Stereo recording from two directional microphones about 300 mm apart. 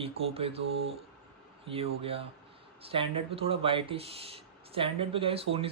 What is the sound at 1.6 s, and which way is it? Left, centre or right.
Speech, centre.